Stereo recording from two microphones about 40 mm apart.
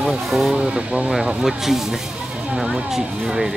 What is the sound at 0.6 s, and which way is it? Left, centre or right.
Speech, right.